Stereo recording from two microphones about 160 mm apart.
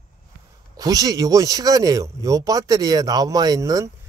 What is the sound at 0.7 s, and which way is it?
Speech, 25° right (ahead or behind).